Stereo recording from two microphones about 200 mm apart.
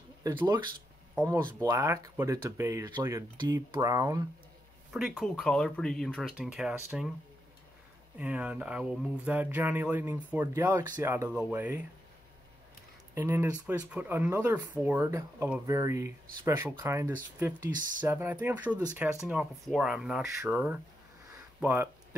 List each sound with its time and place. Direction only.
0.2 s speech: 20° right (ahead or behind)
4.9 s speech: centre (ahead or behind)
8.2 s speech: 5° right (ahead or behind)
13.1 s speech: 10° right (ahead or behind)
19.2 s speech: 5° right (ahead or behind)